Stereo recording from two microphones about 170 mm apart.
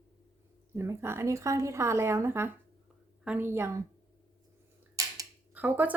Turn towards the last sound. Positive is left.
turn(degrees=-10)  # may be behind; listen again after turning